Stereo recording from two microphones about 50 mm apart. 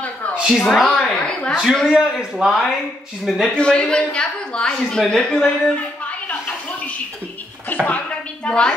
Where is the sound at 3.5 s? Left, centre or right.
Left.